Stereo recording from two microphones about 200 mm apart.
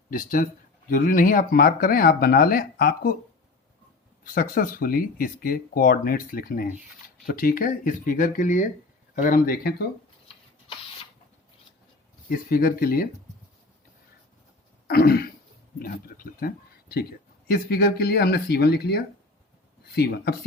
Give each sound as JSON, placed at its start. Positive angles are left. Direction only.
{"t": 0.1, "sound": "speech", "side_deg": 45}
{"t": 4.2, "sound": "speech", "side_deg": 45}
{"t": 12.3, "sound": "speech", "side_deg": 50}
{"t": 14.8, "sound": "throat clearing", "side_deg": 50}
{"t": 15.8, "sound": "speech", "side_deg": 45}